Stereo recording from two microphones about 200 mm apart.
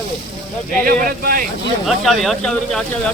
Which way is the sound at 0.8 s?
45° right (ahead or behind).